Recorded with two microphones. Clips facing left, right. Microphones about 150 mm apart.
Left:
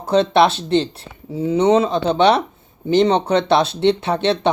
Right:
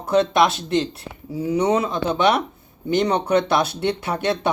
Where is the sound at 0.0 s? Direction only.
30° left (ahead or behind).